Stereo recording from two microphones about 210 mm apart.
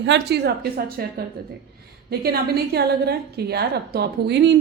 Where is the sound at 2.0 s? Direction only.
50° right (ahead or behind).